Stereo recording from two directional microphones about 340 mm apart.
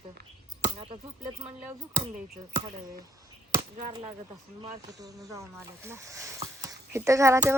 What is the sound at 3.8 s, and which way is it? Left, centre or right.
Speech, centre.